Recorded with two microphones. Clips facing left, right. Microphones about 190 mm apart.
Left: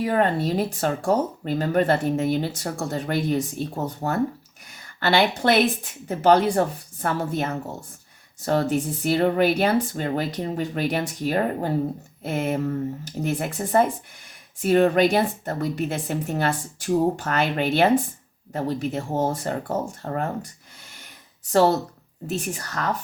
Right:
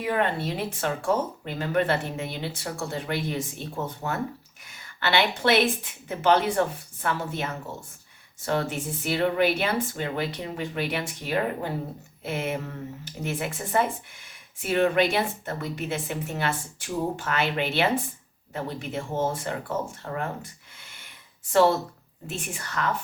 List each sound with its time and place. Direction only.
0.0 s speech: 40° left (ahead or behind)